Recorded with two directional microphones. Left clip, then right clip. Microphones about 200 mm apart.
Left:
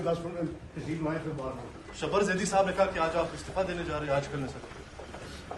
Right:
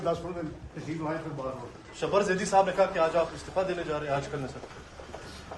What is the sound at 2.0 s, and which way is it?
A man's voice, 45° right (ahead or behind).